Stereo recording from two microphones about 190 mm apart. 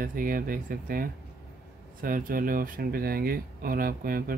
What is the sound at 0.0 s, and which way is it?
Speech, 45° right (ahead or behind).